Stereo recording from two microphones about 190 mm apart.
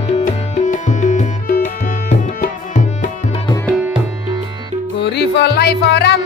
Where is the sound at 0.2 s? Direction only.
40° left (ahead or behind).